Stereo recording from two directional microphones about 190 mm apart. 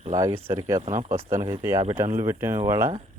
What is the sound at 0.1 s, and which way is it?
Speech, 20° right (ahead or behind).